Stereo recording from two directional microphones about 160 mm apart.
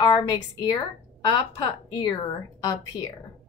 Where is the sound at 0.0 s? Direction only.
25° left (ahead or behind).